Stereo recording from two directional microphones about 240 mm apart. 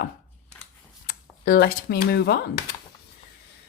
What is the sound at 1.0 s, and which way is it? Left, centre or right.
Speech, left.